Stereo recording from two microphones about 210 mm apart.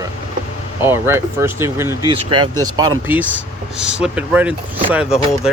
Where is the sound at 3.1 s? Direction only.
10° right (ahead or behind).